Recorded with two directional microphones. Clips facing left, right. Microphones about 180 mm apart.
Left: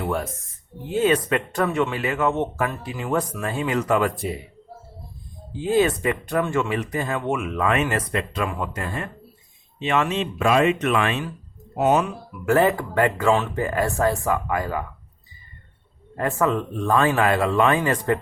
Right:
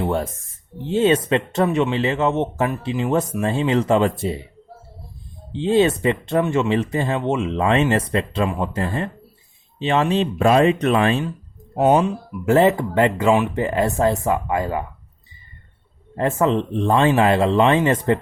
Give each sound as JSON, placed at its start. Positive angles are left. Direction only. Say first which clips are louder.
{"t": 0.0, "sound": "speech", "louder": "right 4 dB", "side_deg": -30}
{"t": 5.5, "sound": "speech", "louder": "right 3 dB", "side_deg": -25}
{"t": 16.1, "sound": "speech", "louder": "right 3 dB", "side_deg": -25}